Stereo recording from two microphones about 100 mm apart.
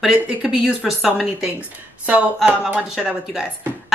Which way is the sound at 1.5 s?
15° right (ahead or behind).